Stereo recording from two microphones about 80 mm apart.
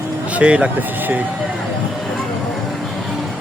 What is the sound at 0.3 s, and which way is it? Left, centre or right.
Speech, centre.